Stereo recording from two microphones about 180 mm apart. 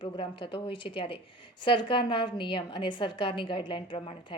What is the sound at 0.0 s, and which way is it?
Speech, 30° left (ahead or behind).